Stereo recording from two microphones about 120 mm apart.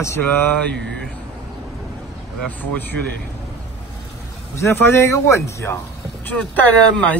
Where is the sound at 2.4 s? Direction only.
10° left (ahead or behind).